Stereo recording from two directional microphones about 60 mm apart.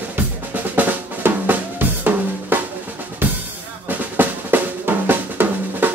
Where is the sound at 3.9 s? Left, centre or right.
Right.